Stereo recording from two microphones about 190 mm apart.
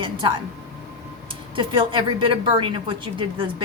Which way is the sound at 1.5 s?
25° right (ahead or behind).